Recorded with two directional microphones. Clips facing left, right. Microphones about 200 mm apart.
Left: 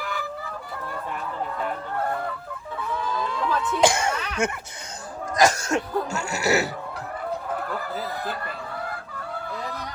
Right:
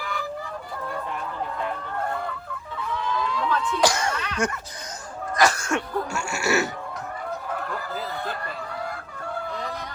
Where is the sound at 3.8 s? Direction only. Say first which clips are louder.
Left 3 dB; 25° left (ahead or behind).